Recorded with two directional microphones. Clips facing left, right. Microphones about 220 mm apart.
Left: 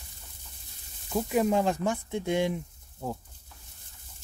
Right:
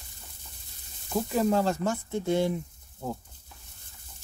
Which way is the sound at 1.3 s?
15° left (ahead or behind).